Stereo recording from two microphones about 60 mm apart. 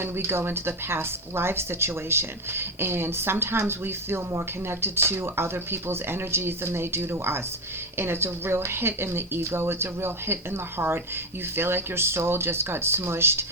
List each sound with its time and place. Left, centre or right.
0.0 s a woman's voice: right